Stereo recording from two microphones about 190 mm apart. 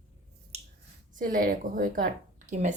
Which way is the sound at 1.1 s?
45° right (ahead or behind).